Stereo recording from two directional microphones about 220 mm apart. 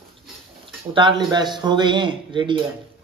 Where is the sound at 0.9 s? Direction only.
20° right (ahead or behind).